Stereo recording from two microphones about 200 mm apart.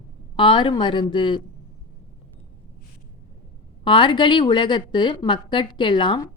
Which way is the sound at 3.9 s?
25° left (ahead or behind).